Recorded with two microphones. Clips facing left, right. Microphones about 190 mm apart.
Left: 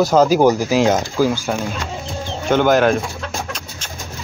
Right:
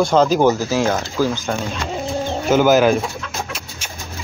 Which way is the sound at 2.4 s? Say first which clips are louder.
Right 1 dB; 5° right (ahead or behind).